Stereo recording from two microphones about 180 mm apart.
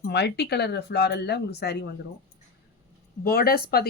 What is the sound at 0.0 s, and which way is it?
Speech, 70° left (ahead or behind).